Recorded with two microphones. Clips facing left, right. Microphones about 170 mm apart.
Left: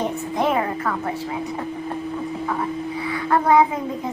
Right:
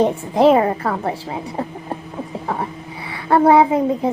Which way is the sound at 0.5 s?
35° right (ahead or behind).